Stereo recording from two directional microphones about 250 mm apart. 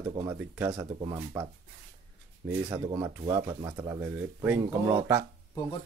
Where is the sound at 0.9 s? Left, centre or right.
Right.